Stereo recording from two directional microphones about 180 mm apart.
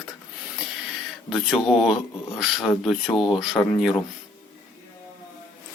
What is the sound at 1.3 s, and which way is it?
Speech, centre (ahead or behind).